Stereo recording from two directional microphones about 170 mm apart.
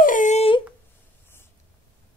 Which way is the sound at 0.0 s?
50° left (ahead or behind).